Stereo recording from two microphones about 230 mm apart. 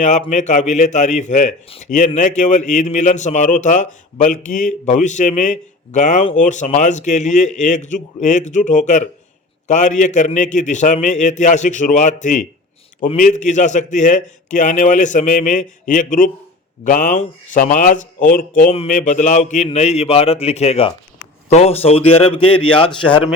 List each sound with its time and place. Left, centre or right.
0.0 s a man's voice: left